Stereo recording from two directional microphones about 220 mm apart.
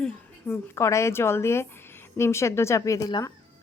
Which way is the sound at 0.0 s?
5° left (ahead or behind).